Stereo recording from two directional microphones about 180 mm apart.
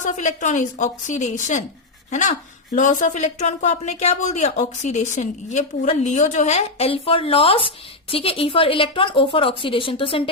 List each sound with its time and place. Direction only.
0.0 s a woman's voice: 40° left (ahead or behind)